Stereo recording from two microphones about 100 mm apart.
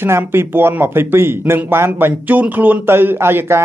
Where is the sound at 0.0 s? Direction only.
25° right (ahead or behind).